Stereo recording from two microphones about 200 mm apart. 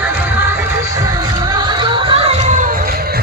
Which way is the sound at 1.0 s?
20° right (ahead or behind).